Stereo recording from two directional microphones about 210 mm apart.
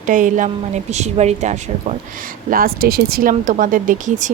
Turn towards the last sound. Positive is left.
turn(degrees=-40)  # may be behind; listen again after turning